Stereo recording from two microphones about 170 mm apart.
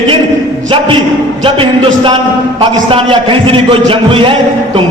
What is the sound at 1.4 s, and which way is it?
A man's voice, 30° right (ahead or behind).